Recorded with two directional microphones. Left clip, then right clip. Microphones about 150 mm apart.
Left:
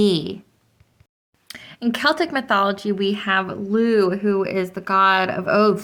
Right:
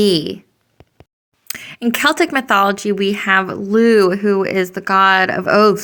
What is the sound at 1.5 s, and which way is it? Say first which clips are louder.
Speech: right 5 dB; 35° right (ahead or behind).